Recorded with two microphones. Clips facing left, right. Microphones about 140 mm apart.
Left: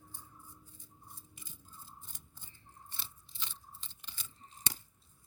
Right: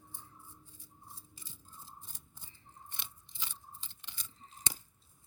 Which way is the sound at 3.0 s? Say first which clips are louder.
Left 1 dB; 15° right (ahead or behind).